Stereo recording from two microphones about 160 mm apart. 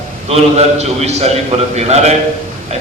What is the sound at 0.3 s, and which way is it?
A man's voice, 40° right (ahead or behind).